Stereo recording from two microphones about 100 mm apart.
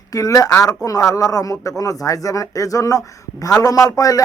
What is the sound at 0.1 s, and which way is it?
Speech, 35° left (ahead or behind).